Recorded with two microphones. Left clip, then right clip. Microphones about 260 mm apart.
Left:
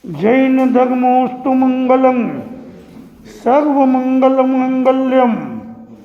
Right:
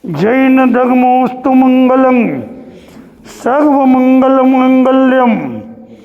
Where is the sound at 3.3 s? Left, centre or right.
Right.